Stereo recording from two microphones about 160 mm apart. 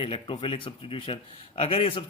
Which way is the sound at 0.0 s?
35° left (ahead or behind).